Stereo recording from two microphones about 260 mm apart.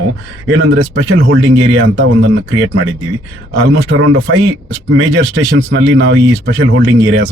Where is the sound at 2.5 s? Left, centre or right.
Right.